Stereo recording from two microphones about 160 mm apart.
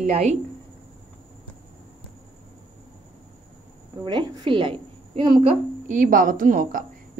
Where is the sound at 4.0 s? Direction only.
30° right (ahead or behind).